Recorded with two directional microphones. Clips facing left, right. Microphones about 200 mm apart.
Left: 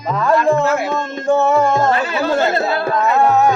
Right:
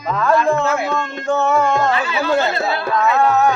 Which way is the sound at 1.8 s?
45° left (ahead or behind).